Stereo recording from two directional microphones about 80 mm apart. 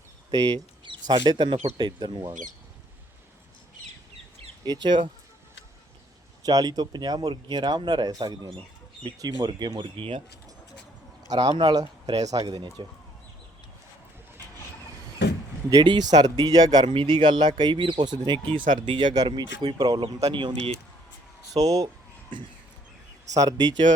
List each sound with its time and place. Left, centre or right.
0.9 s speech: right
4.6 s speech: right
6.4 s speech: right
11.3 s speech: right
15.7 s speech: right
20.3 s speech: right
21.5 s speech: right
23.3 s speech: right